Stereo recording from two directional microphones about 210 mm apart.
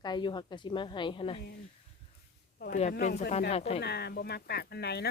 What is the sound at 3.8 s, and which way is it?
Speech, 50° left (ahead or behind).